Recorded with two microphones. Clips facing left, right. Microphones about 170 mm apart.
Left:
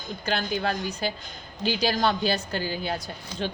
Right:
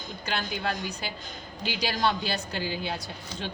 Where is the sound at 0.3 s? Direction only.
45° left (ahead or behind).